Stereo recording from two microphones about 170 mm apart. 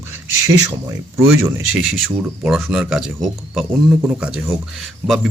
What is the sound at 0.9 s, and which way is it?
Speech, 20° right (ahead or behind).